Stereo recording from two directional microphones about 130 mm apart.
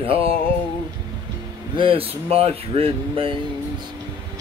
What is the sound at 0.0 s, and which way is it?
Speech, 45° right (ahead or behind).